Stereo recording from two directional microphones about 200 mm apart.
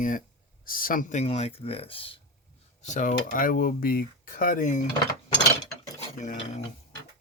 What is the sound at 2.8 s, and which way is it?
Speech, 40° left (ahead or behind).